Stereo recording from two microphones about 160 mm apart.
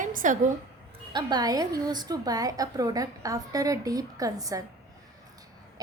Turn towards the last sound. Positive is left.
turn(degrees=-20)  # may be behind; listen again after turning